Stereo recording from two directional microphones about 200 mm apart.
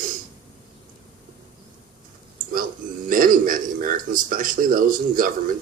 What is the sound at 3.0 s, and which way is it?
Speech, 45° right (ahead or behind).